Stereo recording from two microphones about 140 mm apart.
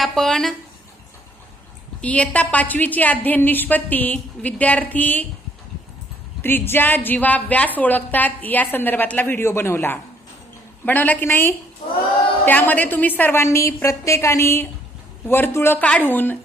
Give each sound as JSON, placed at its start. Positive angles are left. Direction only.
{"t": 0.0, "sound": "speech", "side_deg": 5}
{"t": 2.0, "sound": "a woman's voice", "side_deg": 10}
{"t": 6.4, "sound": "a woman's voice", "side_deg": 15}